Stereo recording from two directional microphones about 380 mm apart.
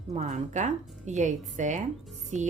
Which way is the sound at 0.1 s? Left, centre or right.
Centre.